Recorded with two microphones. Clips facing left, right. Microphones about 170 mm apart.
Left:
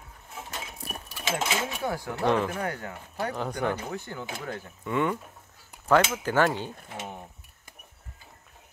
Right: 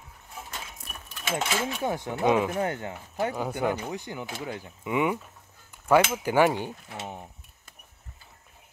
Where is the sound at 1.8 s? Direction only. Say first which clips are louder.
Right 2 dB; 20° right (ahead or behind).